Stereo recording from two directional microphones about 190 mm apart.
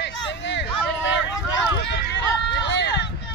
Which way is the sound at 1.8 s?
60° left (ahead or behind).